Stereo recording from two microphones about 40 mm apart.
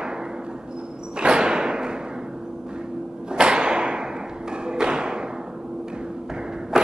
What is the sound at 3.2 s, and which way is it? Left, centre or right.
Thump, right.